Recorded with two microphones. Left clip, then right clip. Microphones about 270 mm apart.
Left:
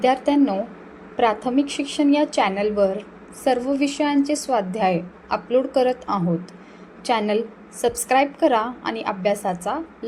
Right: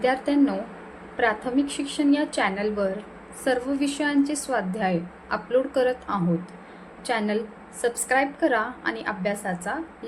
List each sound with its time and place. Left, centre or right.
0.0 s a woman's voice: centre